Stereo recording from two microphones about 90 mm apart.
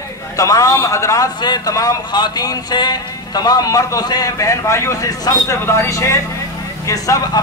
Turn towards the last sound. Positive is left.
turn(degrees=40)  # may be behind; listen again after turning